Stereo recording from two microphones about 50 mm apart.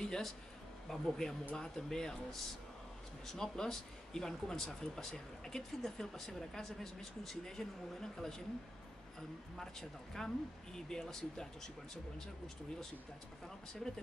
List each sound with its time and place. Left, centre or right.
0.0 s a sound: centre
0.8 s speech: centre
9.6 s speech: centre